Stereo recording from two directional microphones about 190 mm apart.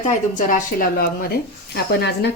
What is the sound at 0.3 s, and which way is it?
Speech, 45° left (ahead or behind).